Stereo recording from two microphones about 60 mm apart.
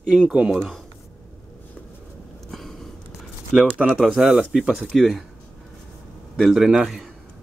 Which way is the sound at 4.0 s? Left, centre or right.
Centre.